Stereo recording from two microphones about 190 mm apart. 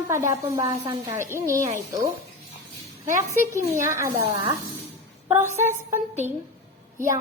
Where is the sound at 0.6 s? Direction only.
25° right (ahead or behind).